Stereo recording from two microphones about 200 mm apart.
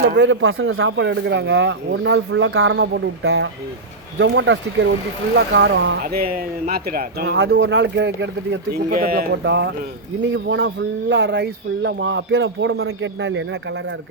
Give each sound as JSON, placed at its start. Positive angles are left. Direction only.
{"t": 0.2, "sound": "speech", "side_deg": -75}
{"t": 4.2, "sound": "speech", "side_deg": -65}
{"t": 8.9, "sound": "a man's voice", "side_deg": -45}